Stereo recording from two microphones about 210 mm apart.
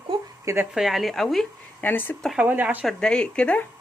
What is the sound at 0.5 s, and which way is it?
Speech, centre (ahead or behind).